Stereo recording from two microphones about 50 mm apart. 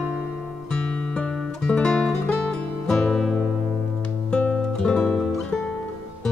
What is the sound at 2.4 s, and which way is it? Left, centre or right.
Music, centre.